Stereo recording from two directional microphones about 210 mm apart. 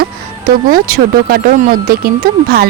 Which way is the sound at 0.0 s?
45° right (ahead or behind).